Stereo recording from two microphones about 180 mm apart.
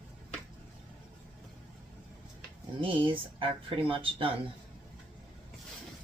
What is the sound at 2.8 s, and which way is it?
Speech, 30° right (ahead or behind).